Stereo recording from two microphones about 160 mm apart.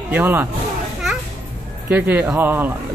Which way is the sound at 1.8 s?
10° right (ahead or behind).